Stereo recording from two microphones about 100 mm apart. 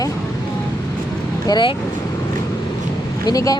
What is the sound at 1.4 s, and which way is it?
Speech, 45° left (ahead or behind).